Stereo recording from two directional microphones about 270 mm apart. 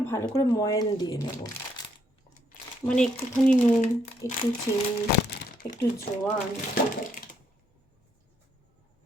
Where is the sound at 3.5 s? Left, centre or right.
Left.